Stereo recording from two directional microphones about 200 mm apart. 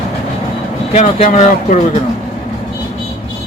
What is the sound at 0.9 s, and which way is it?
Speech, 35° left (ahead or behind).